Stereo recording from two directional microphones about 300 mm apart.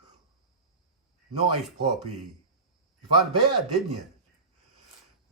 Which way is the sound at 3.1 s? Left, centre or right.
Centre.